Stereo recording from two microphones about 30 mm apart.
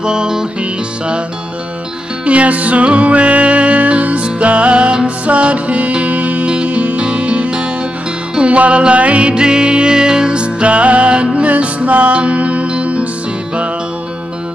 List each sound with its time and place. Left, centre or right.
0.0 s music: right
0.6 s music: right
2.2 s music: right
6.5 s music: right
9.3 s music: right